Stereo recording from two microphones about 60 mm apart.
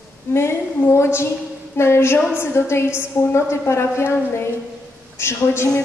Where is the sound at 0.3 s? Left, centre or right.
Left.